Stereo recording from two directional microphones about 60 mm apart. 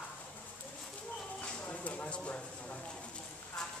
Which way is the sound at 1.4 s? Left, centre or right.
Left.